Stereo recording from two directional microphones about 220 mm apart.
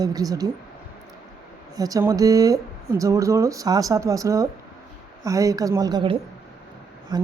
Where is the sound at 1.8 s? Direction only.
15° right (ahead or behind).